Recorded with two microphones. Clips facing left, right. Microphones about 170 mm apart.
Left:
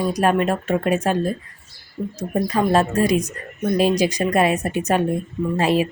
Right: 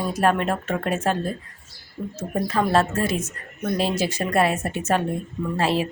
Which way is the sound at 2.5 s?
15° left (ahead or behind).